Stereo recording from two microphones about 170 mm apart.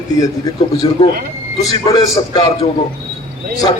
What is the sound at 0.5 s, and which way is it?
A man's voice, 20° left (ahead or behind).